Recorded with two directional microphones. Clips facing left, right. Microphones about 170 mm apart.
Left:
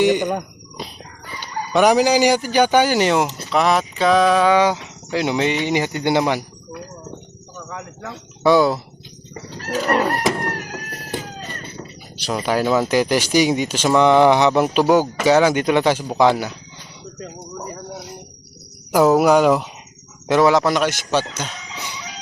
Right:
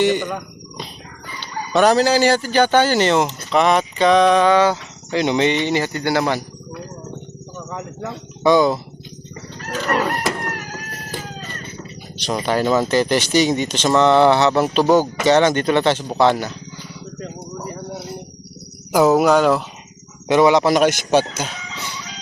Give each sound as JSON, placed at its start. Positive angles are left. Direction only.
{"t": 0.0, "sound": "speech", "side_deg": 15}
{"t": 1.4, "sound": "speech", "side_deg": 15}
{"t": 8.4, "sound": "speech", "side_deg": 5}
{"t": 9.8, "sound": "chicken", "side_deg": 20}
{"t": 10.5, "sound": "cat", "side_deg": 30}
{"t": 12.1, "sound": "speech", "side_deg": 10}
{"t": 17.6, "sound": "a sound", "side_deg": 15}
{"t": 18.9, "sound": "speech", "side_deg": 0}
{"t": 20.7, "sound": "speech", "side_deg": -15}
{"t": 21.8, "sound": "crowing", "side_deg": 15}